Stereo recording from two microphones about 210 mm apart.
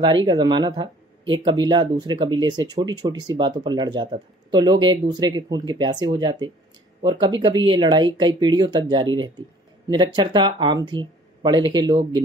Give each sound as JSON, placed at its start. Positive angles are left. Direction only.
{"t": 0.0, "sound": "speech", "side_deg": -20}